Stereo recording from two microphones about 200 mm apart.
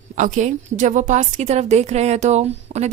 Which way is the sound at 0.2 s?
40° right (ahead or behind).